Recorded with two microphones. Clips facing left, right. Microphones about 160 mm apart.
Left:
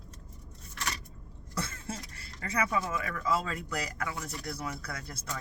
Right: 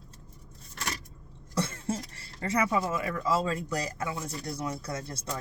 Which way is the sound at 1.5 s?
25° right (ahead or behind).